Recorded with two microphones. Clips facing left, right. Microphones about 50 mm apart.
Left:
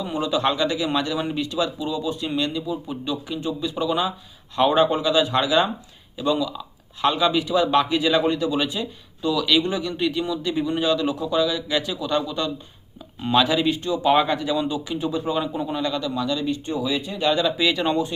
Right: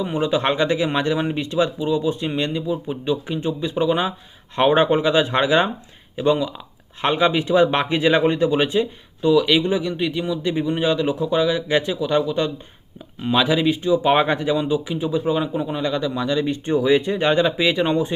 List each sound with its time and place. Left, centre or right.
0.0 s speech: right
11.9 s speech: centre
13.2 s speech: centre; by 17.5 s right
17.6 s speech: centre